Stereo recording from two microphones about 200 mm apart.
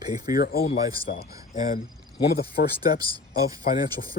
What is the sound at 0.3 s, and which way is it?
Speech, 50° left (ahead or behind).